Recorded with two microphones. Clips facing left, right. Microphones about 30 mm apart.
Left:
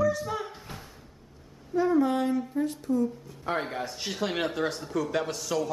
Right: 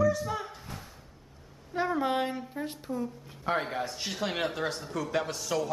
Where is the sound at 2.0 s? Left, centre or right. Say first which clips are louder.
Left 4 dB; right.